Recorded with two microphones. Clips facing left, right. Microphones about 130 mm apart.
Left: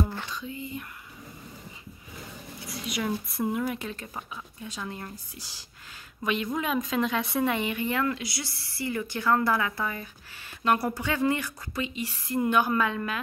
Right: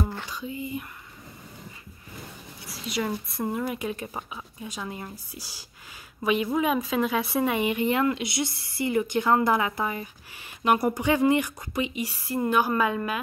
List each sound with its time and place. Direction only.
0.3 s speech: 10° right (ahead or behind)
2.6 s a sound: centre (ahead or behind)
3.5 s speech: centre (ahead or behind)
3.8 s speech: 15° right (ahead or behind)